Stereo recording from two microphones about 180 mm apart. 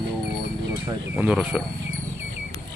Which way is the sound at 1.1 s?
5° right (ahead or behind).